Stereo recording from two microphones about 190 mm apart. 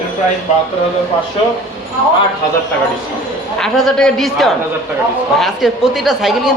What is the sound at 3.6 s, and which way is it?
Speech, centre (ahead or behind).